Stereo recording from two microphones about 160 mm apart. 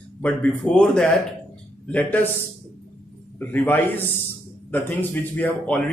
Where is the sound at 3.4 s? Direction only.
10° left (ahead or behind).